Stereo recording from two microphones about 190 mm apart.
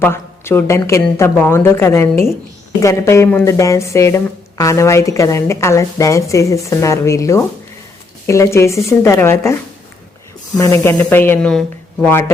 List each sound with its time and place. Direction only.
0.0 s speech: 10° left (ahead or behind)
10.6 s speech: 15° left (ahead or behind)